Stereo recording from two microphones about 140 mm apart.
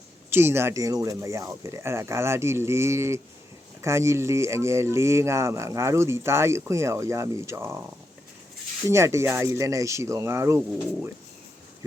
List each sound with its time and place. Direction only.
0.3 s speech: 15° right (ahead or behind)
8.9 s speech: 20° right (ahead or behind)